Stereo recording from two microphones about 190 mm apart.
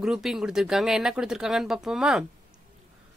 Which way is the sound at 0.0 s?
Centre (ahead or behind).